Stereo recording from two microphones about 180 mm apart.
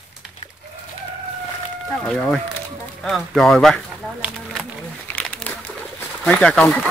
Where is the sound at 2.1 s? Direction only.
5° left (ahead or behind).